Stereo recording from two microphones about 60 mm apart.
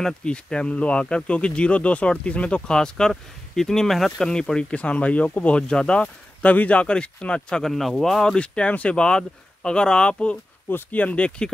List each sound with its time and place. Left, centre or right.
0.0 s speech: centre
8.4 s speech: centre